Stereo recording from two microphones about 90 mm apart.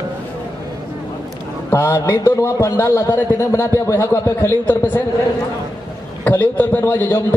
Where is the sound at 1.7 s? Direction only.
25° left (ahead or behind).